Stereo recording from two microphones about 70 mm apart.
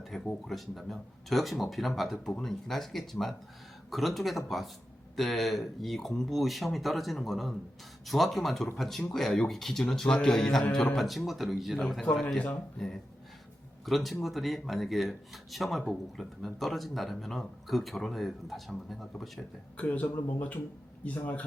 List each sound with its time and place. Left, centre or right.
0.1 s speech: centre
13.8 s speech: centre
19.7 s a man's voice: left